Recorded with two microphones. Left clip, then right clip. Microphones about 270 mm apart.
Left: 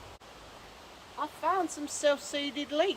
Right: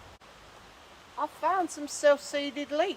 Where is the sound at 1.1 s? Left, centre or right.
Centre.